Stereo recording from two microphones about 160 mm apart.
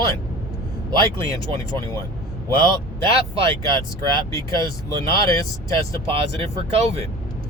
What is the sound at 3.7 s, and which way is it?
Speech, 20° left (ahead or behind).